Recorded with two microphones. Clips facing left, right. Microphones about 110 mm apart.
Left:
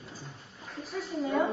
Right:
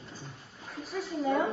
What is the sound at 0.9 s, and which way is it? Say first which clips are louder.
Crowd: right 2 dB; centre (ahead or behind).